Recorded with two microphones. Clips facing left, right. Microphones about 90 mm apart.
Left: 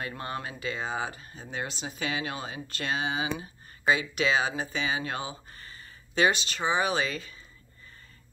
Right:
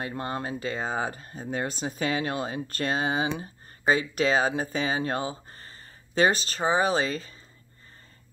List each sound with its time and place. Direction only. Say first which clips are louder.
0.0 s speech: right 3 dB; 35° right (ahead or behind)